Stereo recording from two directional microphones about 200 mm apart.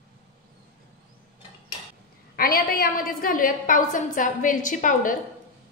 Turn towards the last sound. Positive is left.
turn(degrees=40)  # may be behind; listen again after turning